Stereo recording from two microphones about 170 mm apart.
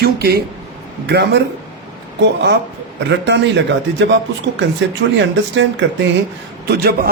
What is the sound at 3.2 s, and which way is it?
Speech, 90° right.